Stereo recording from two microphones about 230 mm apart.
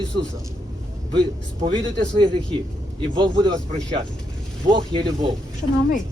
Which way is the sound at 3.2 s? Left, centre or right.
Centre.